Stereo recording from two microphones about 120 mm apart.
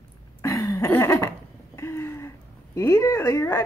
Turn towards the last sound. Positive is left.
turn(degrees=20)  # may be behind; listen again after turning